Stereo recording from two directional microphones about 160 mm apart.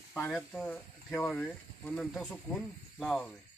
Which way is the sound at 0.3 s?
5° left (ahead or behind).